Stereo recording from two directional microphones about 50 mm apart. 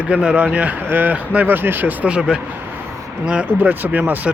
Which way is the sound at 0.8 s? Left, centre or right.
Right.